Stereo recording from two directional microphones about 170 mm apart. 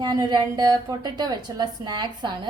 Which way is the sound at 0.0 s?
25° right (ahead or behind).